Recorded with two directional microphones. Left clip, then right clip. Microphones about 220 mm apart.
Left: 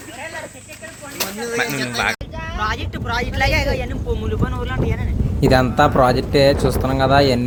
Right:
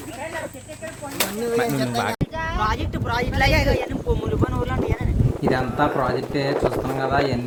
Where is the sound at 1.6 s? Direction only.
50° right (ahead or behind).